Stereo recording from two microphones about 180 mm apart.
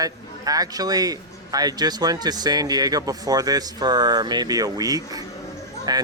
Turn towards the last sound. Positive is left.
turn(degrees=-20)  # may be behind; listen again after turning